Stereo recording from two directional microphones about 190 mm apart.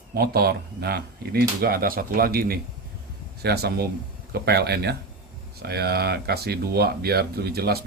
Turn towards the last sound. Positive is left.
turn(degrees=-55)  # may be behind; listen again after turning